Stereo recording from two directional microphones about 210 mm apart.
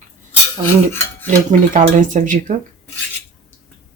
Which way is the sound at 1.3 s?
35° right (ahead or behind).